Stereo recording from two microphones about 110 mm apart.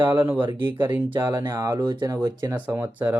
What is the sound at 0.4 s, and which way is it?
Speech, 50° right (ahead or behind).